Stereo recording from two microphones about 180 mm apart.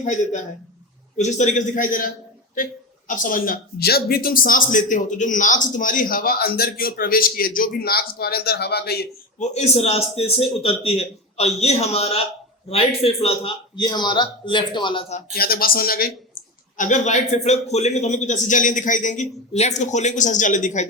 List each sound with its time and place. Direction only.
0.0 s a man's voice: 40° left (ahead or behind)
3.1 s a man's voice: 50° left (ahead or behind)
9.4 s a man's voice: 35° left (ahead or behind)
15.4 s a man's voice: 55° left (ahead or behind)